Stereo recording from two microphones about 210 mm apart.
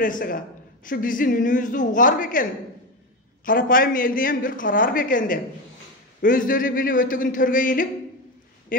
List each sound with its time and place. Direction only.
0.0 s a woman's voice: 40° left (ahead or behind)
3.4 s a woman's voice: 40° left (ahead or behind)